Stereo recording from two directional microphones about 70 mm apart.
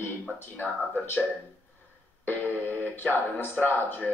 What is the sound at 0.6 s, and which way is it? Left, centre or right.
Speech, left.